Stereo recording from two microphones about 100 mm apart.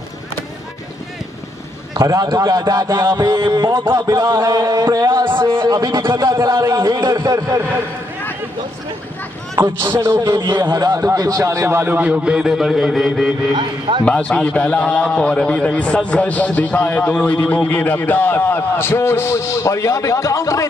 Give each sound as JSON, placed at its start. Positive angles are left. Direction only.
{"t": 2.0, "sound": "speech", "side_deg": -35}
{"t": 3.9, "sound": "speech", "side_deg": -35}
{"t": 4.5, "sound": "speech", "side_deg": -40}
{"t": 4.8, "sound": "speech", "side_deg": -25}
{"t": 5.4, "sound": "a man's voice", "side_deg": -50}
{"t": 5.8, "sound": "speech", "side_deg": -35}
{"t": 9.6, "sound": "a man's voice", "side_deg": -25}
{"t": 13.6, "sound": "a man's voice", "side_deg": -50}
{"t": 14.0, "sound": "a man's voice", "side_deg": 10}